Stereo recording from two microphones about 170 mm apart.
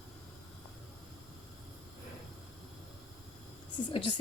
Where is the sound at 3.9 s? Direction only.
25° left (ahead or behind).